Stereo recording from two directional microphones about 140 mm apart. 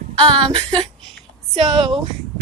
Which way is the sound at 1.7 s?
40° right (ahead or behind).